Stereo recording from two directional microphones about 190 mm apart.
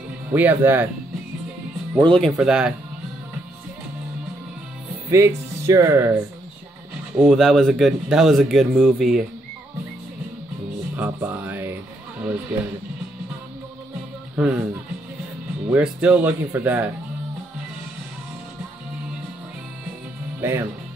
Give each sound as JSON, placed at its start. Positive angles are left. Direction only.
{"t": 0.3, "sound": "speech", "side_deg": -10}
{"t": 2.0, "sound": "speech", "side_deg": 5}
{"t": 5.1, "sound": "speech", "side_deg": -15}
{"t": 7.2, "sound": "speech", "side_deg": 0}
{"t": 11.0, "sound": "speech", "side_deg": -10}
{"t": 14.3, "sound": "speech", "side_deg": -5}
{"t": 15.7, "sound": "speech", "side_deg": -5}
{"t": 20.3, "sound": "speech", "side_deg": -10}